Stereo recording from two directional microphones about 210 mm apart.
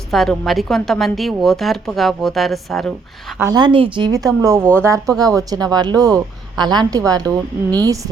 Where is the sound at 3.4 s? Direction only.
20° right (ahead or behind).